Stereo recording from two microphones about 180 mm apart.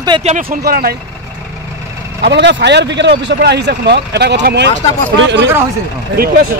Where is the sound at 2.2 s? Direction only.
70° right (ahead or behind).